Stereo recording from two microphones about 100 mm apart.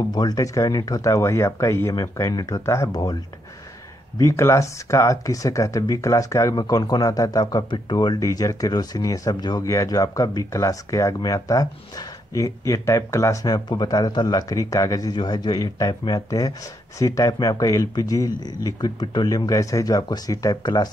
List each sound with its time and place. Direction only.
0.1 s speech: 40° left (ahead or behind)
4.2 s speech: 30° left (ahead or behind)
7.7 s speech: 50° left (ahead or behind)
8.3 s speech: 35° left (ahead or behind)